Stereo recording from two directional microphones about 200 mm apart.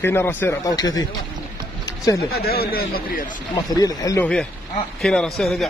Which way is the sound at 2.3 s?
50° left (ahead or behind).